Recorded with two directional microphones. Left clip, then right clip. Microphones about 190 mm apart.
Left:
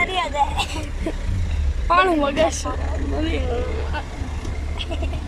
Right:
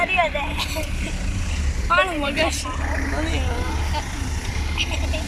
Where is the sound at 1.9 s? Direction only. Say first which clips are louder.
Left 2 dB; 25° left (ahead or behind).